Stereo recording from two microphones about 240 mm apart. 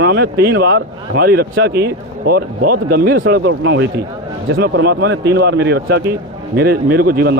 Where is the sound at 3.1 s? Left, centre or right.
Right.